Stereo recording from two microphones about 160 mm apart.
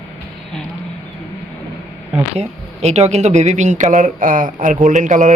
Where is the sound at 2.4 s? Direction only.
45° right (ahead or behind).